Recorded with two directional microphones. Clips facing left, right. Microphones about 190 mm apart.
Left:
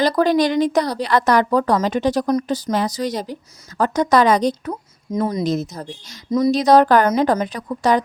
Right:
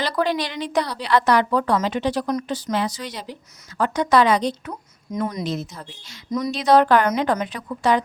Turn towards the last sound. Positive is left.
turn(degrees=40)  # may be behind; listen again after turning